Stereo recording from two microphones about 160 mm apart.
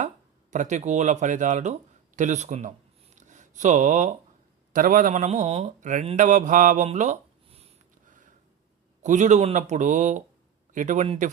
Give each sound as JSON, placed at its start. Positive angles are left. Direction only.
{"t": 0.5, "sound": "speech", "side_deg": -50}
{"t": 3.2, "sound": "a sound", "side_deg": -50}
{"t": 4.7, "sound": "speech", "side_deg": -60}
{"t": 9.0, "sound": "speech", "side_deg": -50}